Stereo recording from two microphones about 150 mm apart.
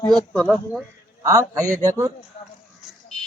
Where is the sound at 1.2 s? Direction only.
20° right (ahead or behind).